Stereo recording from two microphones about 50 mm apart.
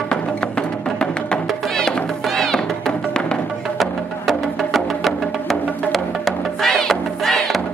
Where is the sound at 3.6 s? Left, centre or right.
Centre.